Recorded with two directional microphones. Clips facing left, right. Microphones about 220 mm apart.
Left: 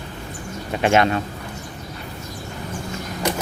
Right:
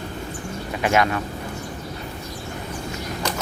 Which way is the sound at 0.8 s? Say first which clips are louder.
Left 3 dB; 30° left (ahead or behind).